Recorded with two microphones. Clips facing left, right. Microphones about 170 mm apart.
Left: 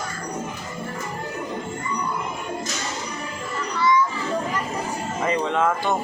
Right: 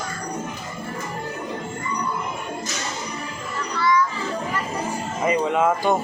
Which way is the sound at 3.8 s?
20° left (ahead or behind).